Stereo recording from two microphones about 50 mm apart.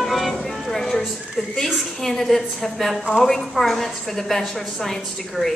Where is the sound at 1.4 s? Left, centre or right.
Centre.